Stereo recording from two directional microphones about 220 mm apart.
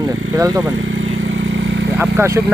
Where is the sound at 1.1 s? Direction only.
55° right (ahead or behind).